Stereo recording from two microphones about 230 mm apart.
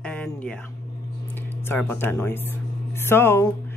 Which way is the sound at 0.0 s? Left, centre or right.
Centre.